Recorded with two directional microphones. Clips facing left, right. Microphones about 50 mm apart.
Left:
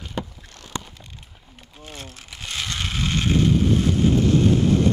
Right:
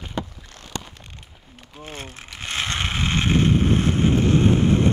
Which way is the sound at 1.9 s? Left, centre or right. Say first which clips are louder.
Right 2 dB; right.